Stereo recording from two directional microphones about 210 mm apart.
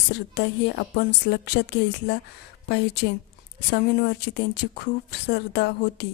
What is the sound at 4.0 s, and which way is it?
A woman's voice, 50° left (ahead or behind).